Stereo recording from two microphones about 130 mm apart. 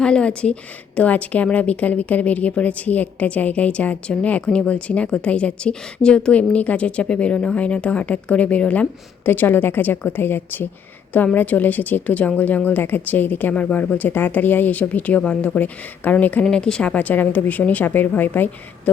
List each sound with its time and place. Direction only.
0.0 s speech: 5° left (ahead or behind)